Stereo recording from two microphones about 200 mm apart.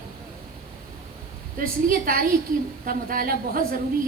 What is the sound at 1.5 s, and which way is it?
A woman's voice, 45° right (ahead or behind).